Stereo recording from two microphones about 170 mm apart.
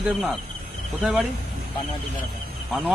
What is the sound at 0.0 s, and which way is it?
Speech, centre (ahead or behind).